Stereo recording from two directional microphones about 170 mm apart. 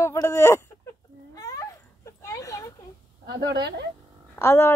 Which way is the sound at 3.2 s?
90° right.